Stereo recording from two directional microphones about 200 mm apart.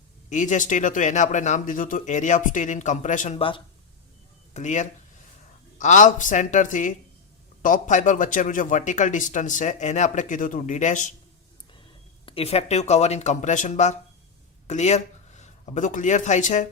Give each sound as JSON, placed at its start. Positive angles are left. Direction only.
{"t": 0.3, "sound": "a man's voice", "side_deg": 40}
{"t": 12.2, "sound": "a man's voice", "side_deg": 30}